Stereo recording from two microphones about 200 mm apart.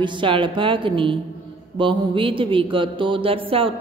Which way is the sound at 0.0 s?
25° right (ahead or behind).